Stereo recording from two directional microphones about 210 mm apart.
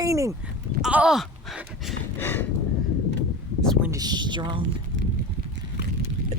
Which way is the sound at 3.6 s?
5° left (ahead or behind).